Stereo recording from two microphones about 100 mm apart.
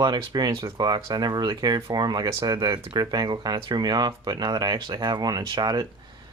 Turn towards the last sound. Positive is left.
turn(degrees=-45)  # may be behind; listen again after turning